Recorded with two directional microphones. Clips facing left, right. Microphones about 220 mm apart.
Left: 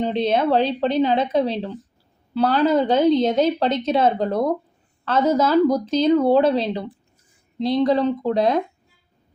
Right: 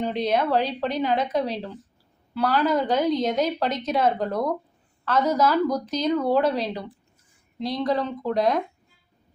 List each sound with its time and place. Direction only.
0.0 s a woman's voice: 25° left (ahead or behind)